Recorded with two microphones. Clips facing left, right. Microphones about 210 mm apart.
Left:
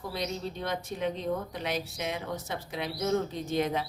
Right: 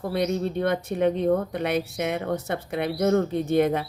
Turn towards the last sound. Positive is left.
turn(degrees=-60)  # may be behind; listen again after turning